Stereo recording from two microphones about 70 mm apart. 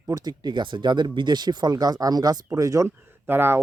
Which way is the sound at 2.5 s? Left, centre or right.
Right.